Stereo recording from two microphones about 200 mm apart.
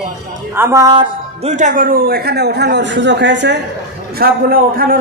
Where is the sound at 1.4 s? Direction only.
40° right (ahead or behind); by 3.5 s 60° right (ahead or behind).